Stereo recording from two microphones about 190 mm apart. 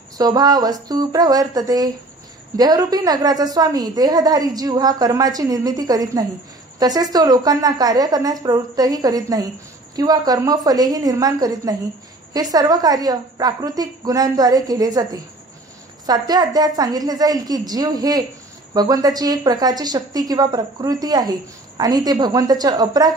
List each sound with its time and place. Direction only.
0.2 s a woman's voice: 20° right (ahead or behind)
16.1 s a woman's voice: 20° right (ahead or behind)